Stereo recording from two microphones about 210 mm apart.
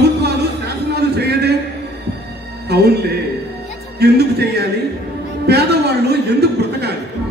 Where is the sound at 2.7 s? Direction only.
50° right (ahead or behind).